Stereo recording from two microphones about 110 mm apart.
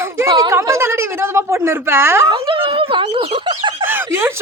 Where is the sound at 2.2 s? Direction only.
55° right (ahead or behind).